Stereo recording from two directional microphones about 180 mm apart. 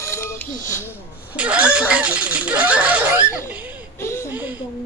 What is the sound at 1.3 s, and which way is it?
Speech, 5° right (ahead or behind).